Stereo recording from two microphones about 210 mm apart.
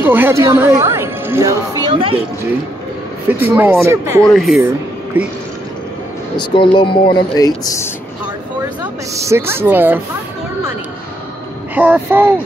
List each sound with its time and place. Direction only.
0.0 s speech: 10° right (ahead or behind); by 2.2 s 25° right (ahead or behind)
3.3 s speech: 10° right (ahead or behind)
4.2 s speech: centre (ahead or behind)
6.3 s speech: 25° left (ahead or behind)
9.1 s speech: 15° right (ahead or behind)
11.7 s speech: 10° right (ahead or behind)